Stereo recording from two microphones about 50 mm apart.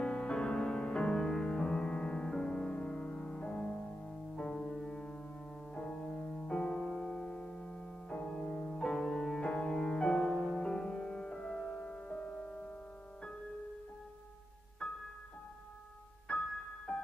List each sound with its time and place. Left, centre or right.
0.0 s music: centre
6.8 s music: centre
8.2 s music: centre
14.8 s music: centre
16.3 s music: left